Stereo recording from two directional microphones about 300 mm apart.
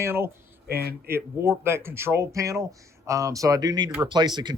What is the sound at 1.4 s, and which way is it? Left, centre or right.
Speech, centre.